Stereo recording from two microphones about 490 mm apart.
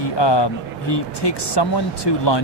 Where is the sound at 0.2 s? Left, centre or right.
Left.